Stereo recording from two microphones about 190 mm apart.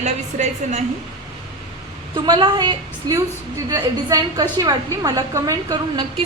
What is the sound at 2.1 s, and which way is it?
A woman's voice, 25° right (ahead or behind).